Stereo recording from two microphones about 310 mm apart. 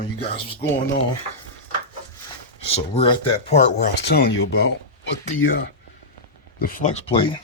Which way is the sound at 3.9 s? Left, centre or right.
Left.